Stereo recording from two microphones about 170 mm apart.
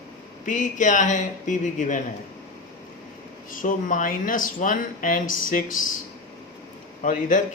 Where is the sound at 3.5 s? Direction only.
50° left (ahead or behind).